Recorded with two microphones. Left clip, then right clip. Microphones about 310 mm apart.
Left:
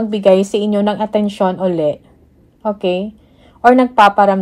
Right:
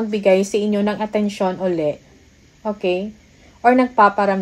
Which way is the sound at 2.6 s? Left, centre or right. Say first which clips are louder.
Left 4 dB; left.